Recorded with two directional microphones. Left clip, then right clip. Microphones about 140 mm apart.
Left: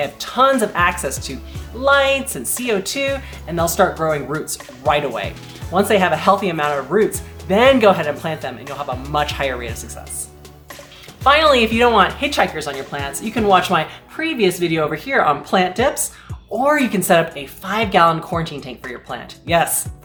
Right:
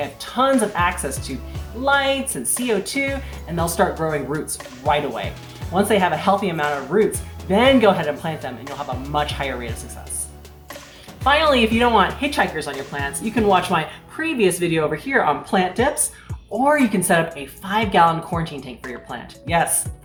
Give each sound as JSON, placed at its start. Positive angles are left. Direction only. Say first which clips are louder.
{"t": 0.0, "sound": "a woman's voice", "louder": "left 5 dB", "side_deg": 30}
{"t": 11.2, "sound": "a woman's voice", "louder": "left 4 dB", "side_deg": 30}